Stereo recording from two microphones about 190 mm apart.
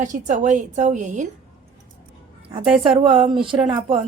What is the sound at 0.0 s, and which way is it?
A woman's voice, 40° right (ahead or behind).